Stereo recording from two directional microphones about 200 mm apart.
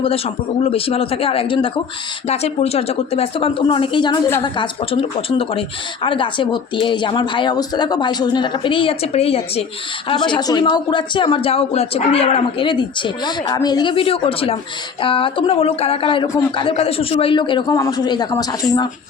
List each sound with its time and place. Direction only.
0.6 s a woman's voice: 30° left (ahead or behind)